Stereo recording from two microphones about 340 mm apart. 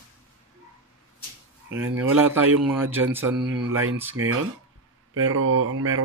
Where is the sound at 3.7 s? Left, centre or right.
Right.